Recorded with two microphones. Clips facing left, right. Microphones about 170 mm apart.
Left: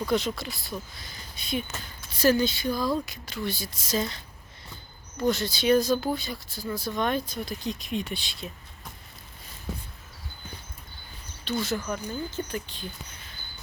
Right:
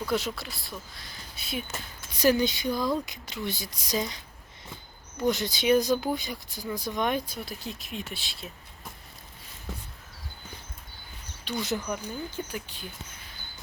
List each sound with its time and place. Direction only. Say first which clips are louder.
0.1 s speech: left 2 dB; 5° right (ahead or behind)
2.1 s speech: left 1 dB; 15° right (ahead or behind)
5.2 s speech: left 1 dB; 15° right (ahead or behind)
11.6 s speech: left 1 dB; 15° right (ahead or behind)